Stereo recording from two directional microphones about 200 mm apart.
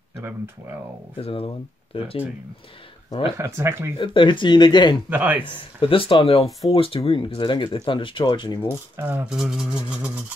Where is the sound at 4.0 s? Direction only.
25° left (ahead or behind).